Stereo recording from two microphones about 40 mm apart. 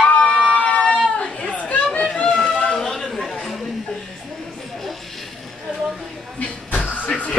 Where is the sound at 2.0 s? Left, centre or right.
Centre.